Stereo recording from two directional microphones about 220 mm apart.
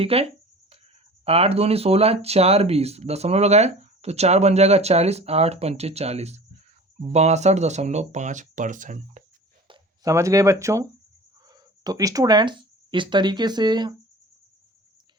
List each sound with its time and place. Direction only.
0.0 s a sound: 25° right (ahead or behind)
1.2 s speech: 25° right (ahead or behind)
9.6 s speech: 15° right (ahead or behind)